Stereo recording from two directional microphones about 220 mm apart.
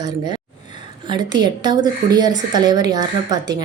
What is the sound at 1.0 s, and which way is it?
A woman's voice, 20° right (ahead or behind).